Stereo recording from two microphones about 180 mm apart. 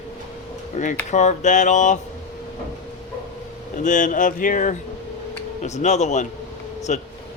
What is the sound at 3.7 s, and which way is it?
Speech, 45° left (ahead or behind).